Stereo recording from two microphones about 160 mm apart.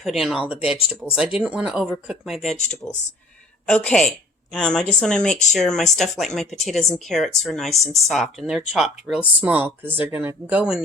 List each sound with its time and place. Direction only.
0.0 s speech: centre (ahead or behind)
3.7 s a woman's voice: 5° left (ahead or behind)